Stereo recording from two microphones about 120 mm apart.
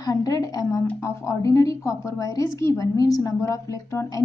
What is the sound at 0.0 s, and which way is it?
A woman's voice, 30° left (ahead or behind).